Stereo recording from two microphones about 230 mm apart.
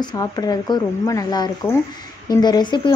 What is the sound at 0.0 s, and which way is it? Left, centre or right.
Speech, centre.